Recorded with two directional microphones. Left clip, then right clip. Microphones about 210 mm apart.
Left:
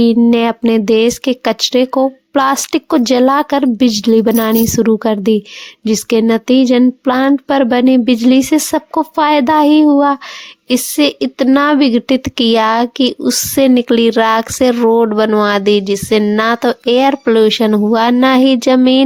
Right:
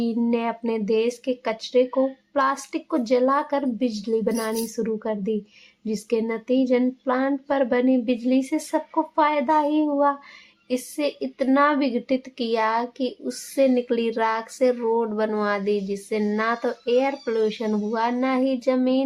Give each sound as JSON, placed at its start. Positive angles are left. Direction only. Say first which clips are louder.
{"t": 0.0, "sound": "a woman's voice", "louder": "left 13 dB", "side_deg": 45}